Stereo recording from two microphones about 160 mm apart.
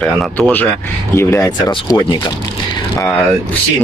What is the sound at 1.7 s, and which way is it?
Speech, 30° left (ahead or behind).